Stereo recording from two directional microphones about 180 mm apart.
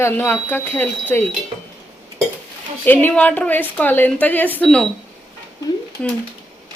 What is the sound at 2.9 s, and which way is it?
A woman's voice, 10° left (ahead or behind).